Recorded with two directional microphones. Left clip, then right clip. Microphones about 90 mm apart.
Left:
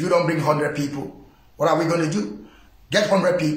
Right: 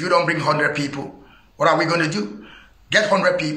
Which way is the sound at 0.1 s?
25° left (ahead or behind).